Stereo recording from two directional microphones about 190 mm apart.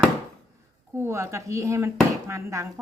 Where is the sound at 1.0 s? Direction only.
15° right (ahead or behind).